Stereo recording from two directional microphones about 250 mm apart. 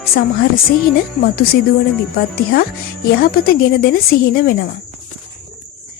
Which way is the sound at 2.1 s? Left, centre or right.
Left.